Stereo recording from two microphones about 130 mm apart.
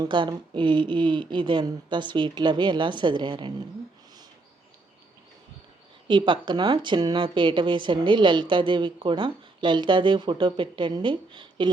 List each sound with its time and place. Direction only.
0.0 s speech: 35° right (ahead or behind)
6.1 s speech: 40° right (ahead or behind)